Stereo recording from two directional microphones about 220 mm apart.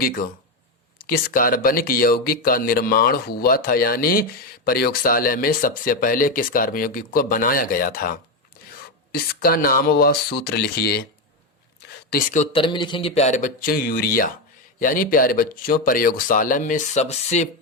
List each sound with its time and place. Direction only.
0.0 s speech: 40° left (ahead or behind)
11.9 s a sound: 40° left (ahead or behind)
12.5 s speech: 20° left (ahead or behind)